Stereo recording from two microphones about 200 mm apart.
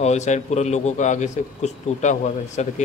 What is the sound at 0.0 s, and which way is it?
A man's voice, 35° left (ahead or behind).